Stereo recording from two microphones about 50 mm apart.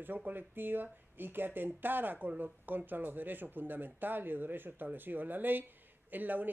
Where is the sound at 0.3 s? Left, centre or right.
Right.